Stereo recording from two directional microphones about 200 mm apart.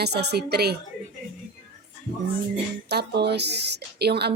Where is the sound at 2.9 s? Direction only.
55° right (ahead or behind).